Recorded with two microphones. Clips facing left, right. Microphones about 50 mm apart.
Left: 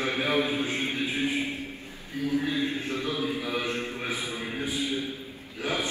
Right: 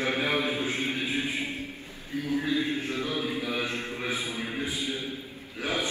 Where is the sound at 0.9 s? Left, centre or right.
Right.